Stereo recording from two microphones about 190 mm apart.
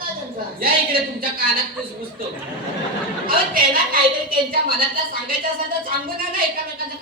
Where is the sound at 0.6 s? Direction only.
50° right (ahead or behind).